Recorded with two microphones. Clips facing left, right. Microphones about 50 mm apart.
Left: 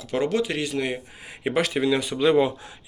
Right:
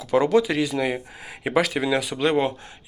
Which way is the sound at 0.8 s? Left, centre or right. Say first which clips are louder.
Right 2 dB; right.